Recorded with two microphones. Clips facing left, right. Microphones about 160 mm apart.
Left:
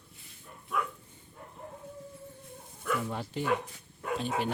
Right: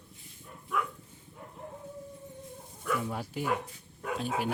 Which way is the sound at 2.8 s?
5° right (ahead or behind).